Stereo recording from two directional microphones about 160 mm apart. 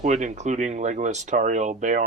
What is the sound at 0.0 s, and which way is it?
Speech, 50° right (ahead or behind).